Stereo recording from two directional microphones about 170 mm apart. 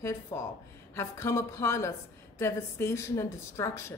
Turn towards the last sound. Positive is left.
turn(degrees=15)  # may be behind; listen again after turning